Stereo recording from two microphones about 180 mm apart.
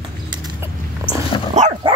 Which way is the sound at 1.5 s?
40° right (ahead or behind).